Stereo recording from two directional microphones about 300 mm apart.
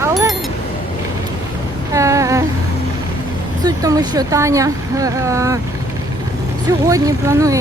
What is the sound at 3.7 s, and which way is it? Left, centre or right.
Speech, centre.